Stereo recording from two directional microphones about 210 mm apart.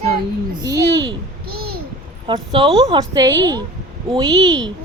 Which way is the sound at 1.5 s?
45° right (ahead or behind).